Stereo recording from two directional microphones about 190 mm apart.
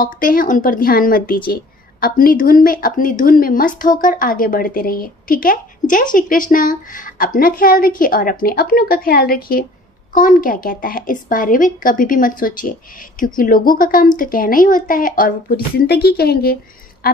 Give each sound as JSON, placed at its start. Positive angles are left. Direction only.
{"t": 0.0, "sound": "speech", "side_deg": 45}